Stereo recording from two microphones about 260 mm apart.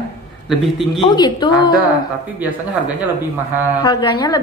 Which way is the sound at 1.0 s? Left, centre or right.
Centre.